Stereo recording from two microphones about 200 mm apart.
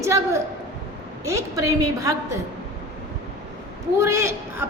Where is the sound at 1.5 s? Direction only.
15° right (ahead or behind).